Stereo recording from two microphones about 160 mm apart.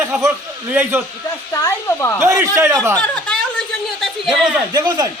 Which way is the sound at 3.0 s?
5° left (ahead or behind).